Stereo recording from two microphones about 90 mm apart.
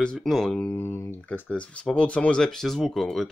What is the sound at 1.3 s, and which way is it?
Speech, 15° left (ahead or behind).